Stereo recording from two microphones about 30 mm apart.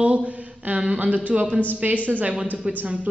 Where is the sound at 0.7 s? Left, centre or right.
Right.